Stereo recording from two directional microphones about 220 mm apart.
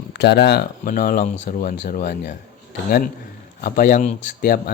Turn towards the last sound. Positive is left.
turn(degrees=40)  # may be behind; listen again after turning